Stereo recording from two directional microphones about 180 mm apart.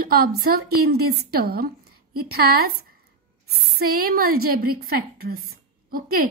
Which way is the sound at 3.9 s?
55° right (ahead or behind).